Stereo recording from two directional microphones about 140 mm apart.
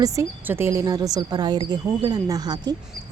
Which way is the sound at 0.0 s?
20° right (ahead or behind).